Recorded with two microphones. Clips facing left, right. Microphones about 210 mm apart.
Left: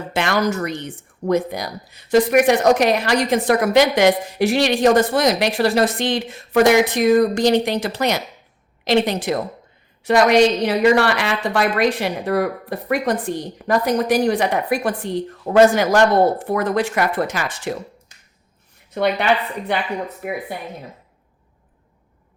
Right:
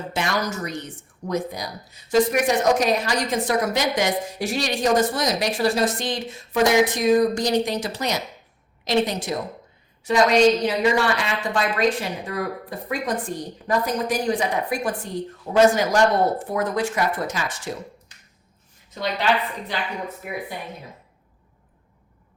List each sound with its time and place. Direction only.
0.1 s speech: 60° left (ahead or behind)
18.9 s speech: 60° left (ahead or behind)